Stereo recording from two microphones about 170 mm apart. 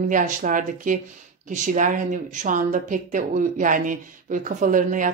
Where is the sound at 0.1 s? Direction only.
50° right (ahead or behind).